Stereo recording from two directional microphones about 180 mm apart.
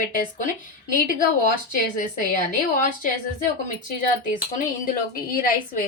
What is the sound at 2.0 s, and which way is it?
Speech, 50° left (ahead or behind).